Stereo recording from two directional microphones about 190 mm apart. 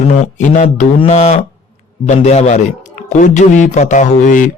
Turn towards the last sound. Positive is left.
turn(degrees=40)  # may be behind; listen again after turning